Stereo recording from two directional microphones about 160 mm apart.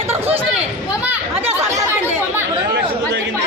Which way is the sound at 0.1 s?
40° right (ahead or behind).